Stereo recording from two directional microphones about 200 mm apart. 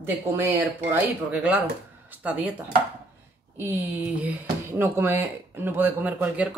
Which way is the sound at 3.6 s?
10° right (ahead or behind).